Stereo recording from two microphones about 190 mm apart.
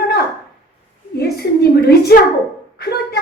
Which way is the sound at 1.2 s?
60° left (ahead or behind).